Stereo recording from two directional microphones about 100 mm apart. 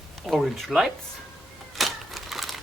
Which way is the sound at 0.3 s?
Centre (ahead or behind).